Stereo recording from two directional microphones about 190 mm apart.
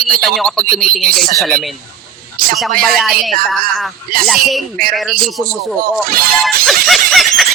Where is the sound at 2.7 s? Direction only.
50° right (ahead or behind).